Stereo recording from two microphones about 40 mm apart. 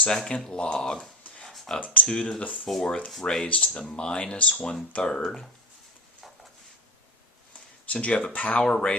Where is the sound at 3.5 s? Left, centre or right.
Left.